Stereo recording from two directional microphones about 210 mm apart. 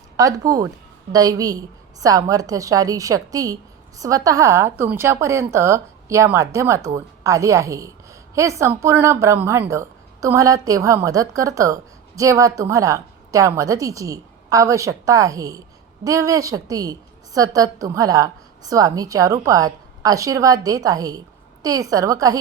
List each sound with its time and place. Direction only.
0.2 s a woman's voice: 15° right (ahead or behind)